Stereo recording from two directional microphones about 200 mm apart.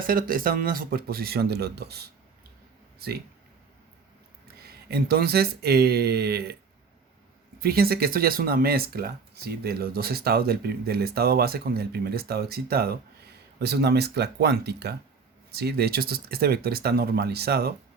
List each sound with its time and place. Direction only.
0.0 s speech: 45° right (ahead or behind)
4.6 s speech: 50° right (ahead or behind)
7.6 s speech: 50° right (ahead or behind)